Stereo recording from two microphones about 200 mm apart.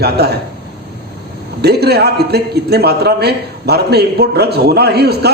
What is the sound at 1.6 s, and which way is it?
A man's voice, 55° right (ahead or behind).